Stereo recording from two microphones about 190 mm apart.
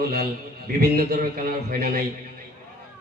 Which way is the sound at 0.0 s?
55° right (ahead or behind).